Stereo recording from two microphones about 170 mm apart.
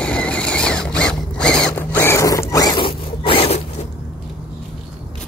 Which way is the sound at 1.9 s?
15° left (ahead or behind).